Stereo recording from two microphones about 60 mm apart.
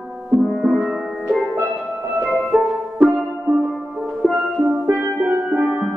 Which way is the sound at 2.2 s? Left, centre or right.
Centre.